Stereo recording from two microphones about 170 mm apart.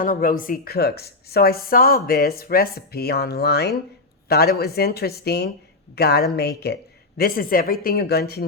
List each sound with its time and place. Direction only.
0.0 s speech: 55° left (ahead or behind); by 6.7 s 70° left (ahead or behind)
7.2 s speech: 60° left (ahead or behind)